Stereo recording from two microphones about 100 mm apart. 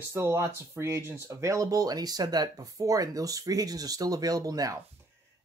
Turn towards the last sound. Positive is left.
turn(degrees=-35)  # may be behind; listen again after turning